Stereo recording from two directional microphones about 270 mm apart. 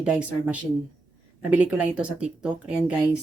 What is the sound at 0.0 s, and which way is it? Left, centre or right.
Speech, centre.